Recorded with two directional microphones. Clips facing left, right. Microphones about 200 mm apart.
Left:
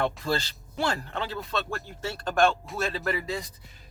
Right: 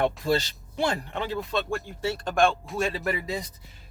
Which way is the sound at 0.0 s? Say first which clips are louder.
Right 3 dB; 20° right (ahead or behind).